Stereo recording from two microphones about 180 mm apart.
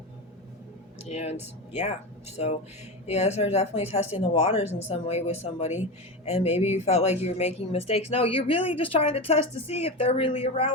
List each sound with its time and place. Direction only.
1.0 s speech: 35° left (ahead or behind)